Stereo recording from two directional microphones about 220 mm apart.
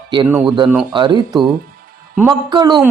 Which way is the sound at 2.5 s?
20° right (ahead or behind).